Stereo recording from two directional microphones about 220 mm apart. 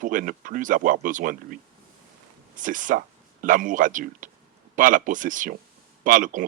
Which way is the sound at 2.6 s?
35° right (ahead or behind).